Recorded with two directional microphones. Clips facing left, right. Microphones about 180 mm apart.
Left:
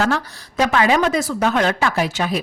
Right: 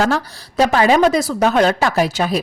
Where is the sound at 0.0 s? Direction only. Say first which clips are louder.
Right 2 dB; 35° right (ahead or behind).